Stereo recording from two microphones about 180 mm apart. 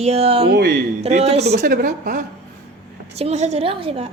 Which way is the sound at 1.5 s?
55° right (ahead or behind).